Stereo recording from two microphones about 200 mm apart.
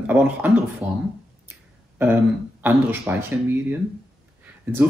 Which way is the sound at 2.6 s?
10° right (ahead or behind).